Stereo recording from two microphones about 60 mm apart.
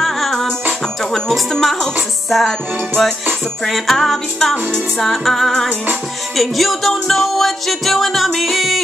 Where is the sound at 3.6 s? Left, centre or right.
Centre.